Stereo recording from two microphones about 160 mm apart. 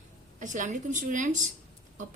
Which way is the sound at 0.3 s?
50° right (ahead or behind).